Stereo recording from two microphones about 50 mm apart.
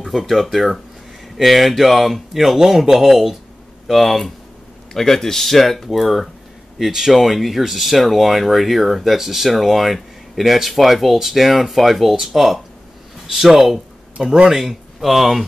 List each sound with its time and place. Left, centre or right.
0.0 s speech: centre
14.1 s speech: centre
14.5 s speech: centre